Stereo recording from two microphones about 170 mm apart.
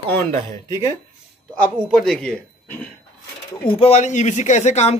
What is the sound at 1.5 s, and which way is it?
Speech, 5° left (ahead or behind).